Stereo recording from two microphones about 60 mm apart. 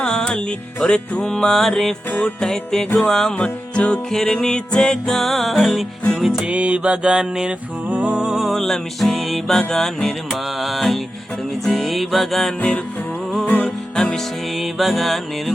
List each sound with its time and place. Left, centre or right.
0.0 s music: centre
3.3 s music: centre
6.4 s music: centre
7.9 s music: right
8.1 s music: centre
8.4 s music: centre
13.4 s music: left
13.9 s music: centre
14.6 s music: centre